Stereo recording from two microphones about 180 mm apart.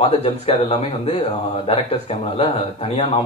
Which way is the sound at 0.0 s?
35° left (ahead or behind).